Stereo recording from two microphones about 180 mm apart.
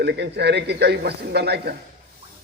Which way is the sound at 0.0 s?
65° right (ahead or behind).